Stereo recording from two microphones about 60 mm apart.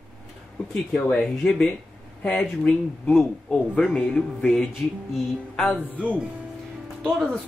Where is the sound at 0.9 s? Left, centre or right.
Centre.